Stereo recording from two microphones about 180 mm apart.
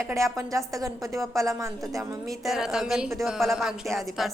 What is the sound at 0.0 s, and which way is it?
A woman's voice, 15° right (ahead or behind).